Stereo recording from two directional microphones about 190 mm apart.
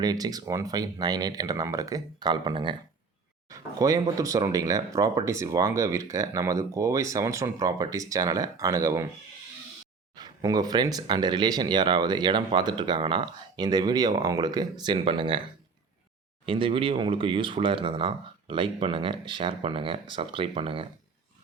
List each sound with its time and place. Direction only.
0.0 s speech: 20° right (ahead or behind)
10.2 s speech: 20° right (ahead or behind)
16.5 s speech: 30° right (ahead or behind)